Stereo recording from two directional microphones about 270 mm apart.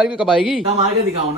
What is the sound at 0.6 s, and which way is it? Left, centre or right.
Speech, right.